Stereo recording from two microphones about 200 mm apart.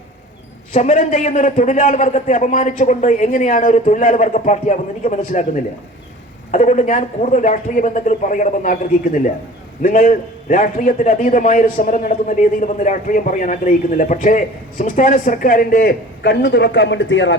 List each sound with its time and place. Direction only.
0.7 s a man's voice: 40° left (ahead or behind)
6.5 s a man's voice: 35° left (ahead or behind)
9.8 s a man's voice: 45° left (ahead or behind); by 17.3 s 65° left (ahead or behind)